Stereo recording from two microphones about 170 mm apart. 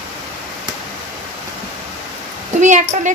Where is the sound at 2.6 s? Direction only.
45° right (ahead or behind).